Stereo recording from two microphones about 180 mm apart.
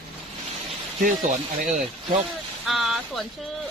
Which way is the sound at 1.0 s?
45° right (ahead or behind).